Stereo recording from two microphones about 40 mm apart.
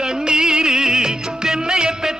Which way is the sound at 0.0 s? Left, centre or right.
Centre.